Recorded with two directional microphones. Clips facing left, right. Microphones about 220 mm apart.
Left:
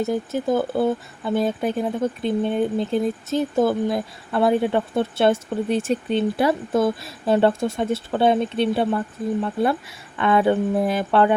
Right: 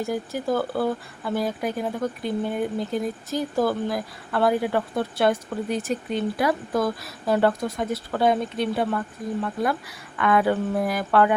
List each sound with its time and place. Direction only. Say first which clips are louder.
0.0 s speech: left 4 dB; 20° left (ahead or behind)